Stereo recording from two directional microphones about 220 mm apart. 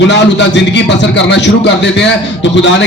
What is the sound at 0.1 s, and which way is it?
A man's voice, 50° left (ahead or behind).